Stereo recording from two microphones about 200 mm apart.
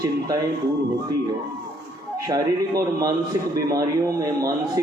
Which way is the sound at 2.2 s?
15° right (ahead or behind).